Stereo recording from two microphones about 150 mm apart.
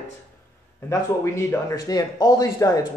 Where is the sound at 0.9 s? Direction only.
20° left (ahead or behind).